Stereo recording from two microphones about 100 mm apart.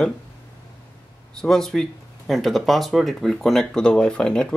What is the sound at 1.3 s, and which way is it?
Speech, 5° left (ahead or behind).